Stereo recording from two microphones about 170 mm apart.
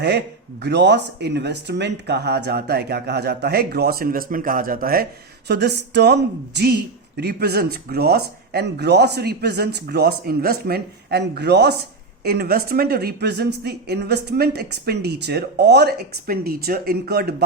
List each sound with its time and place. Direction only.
0.6 s a woman's voice: 85° right; by 5.0 s 60° right (ahead or behind)
5.5 s a woman's voice: 75° right (ahead or behind)